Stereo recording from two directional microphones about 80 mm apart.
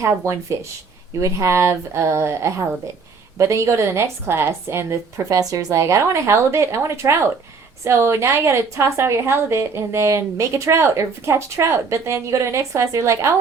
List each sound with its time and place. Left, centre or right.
0.2 s a woman's voice: right